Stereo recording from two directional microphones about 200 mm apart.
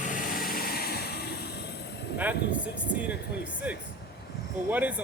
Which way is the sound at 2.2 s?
5° right (ahead or behind).